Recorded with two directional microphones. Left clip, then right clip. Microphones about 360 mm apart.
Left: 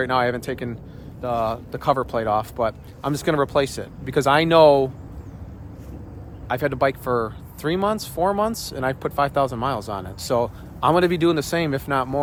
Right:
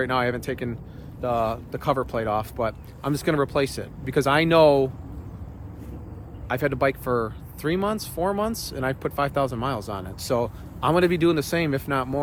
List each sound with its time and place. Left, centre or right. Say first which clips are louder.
0.0 s speech: left 3 dB; centre
6.5 s speech: left 2 dB; centre